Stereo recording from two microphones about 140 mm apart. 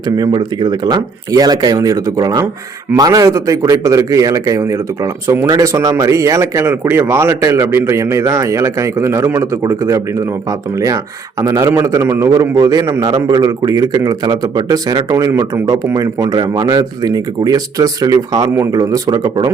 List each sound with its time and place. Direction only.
0.2 s speech: 30° right (ahead or behind)